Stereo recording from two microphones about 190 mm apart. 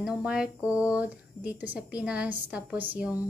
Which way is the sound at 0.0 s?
5° right (ahead or behind).